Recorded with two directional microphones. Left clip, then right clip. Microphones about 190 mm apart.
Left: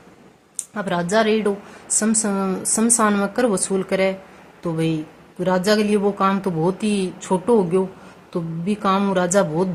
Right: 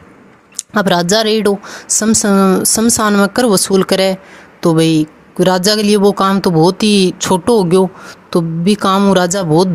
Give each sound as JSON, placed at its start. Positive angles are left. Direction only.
{"t": 0.7, "sound": "speech", "side_deg": -45}